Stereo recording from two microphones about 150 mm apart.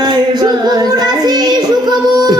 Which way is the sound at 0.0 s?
30° right (ahead or behind).